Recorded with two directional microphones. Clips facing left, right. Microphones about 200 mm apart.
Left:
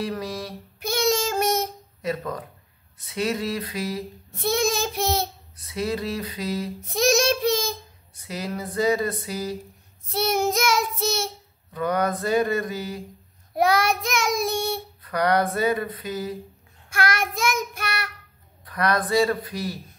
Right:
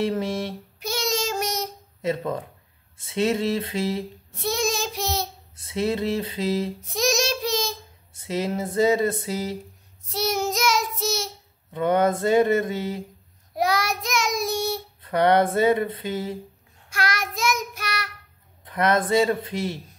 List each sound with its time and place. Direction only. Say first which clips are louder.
0.0 s speech: right 4 dB; 25° right (ahead or behind)
0.7 s child singing: left 4 dB; 55° left (ahead or behind)
2.0 s a sound: right 3 dB; 25° right (ahead or behind)
3.0 s speech: right 3 dB; 25° right (ahead or behind)
4.3 s child singing: left 3 dB; 55° left (ahead or behind)
5.6 s speech: right 3 dB; 25° right (ahead or behind)
6.9 s child singing: left 5 dB; 55° left (ahead or behind)
8.1 s speech: right 5 dB; 25° right (ahead or behind)
10.1 s child singing: left 2 dB; 55° left (ahead or behind)
11.7 s speech: right 3 dB; 25° right (ahead or behind)
13.6 s child singing: left 3 dB; 55° left (ahead or behind)
15.0 s speech: right 3 dB; 25° right (ahead or behind)
16.9 s child singing: left 3 dB; 55° left (ahead or behind)
18.7 s speech: right 2 dB; 25° right (ahead or behind)